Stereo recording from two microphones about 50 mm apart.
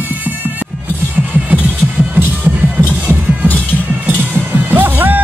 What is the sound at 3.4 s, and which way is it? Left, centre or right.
Music, left.